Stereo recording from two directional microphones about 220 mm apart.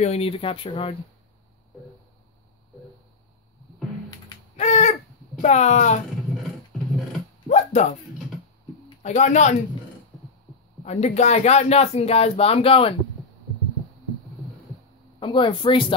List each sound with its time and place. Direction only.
0.0 s speech: 25° left (ahead or behind)
4.6 s a sound: 30° left (ahead or behind)
5.4 s speech: 30° left (ahead or behind)
7.4 s music: 30° left (ahead or behind)
8.8 s speech: 30° left (ahead or behind)
10.8 s speech: 30° left (ahead or behind)
15.1 s speech: 20° left (ahead or behind)